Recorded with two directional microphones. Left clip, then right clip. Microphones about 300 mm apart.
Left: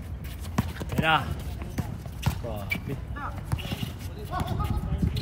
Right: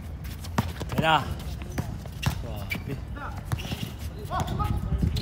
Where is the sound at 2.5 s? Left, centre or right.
Centre.